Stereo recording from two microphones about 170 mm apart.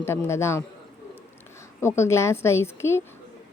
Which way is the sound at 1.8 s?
15° left (ahead or behind).